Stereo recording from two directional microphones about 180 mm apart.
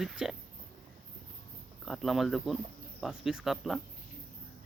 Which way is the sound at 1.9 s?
Centre (ahead or behind).